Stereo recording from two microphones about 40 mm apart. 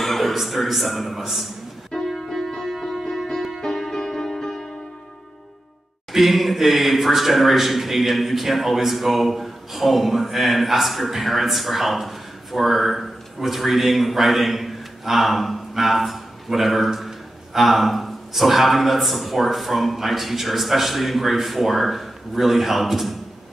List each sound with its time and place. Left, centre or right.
0.0 s a man's voice: centre
2.0 s music: centre
6.1 s speech: centre